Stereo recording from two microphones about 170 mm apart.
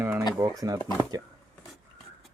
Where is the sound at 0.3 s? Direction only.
20° right (ahead or behind).